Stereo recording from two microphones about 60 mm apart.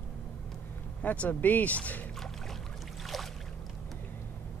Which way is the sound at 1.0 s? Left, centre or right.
Left.